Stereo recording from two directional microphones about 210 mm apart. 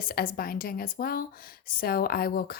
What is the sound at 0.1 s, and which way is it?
Speech, 45° left (ahead or behind).